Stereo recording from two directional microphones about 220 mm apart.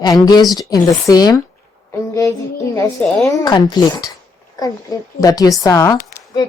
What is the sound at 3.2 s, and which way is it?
Speech, 15° left (ahead or behind).